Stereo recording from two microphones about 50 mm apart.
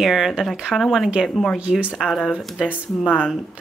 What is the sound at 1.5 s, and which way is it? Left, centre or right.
Speech, right.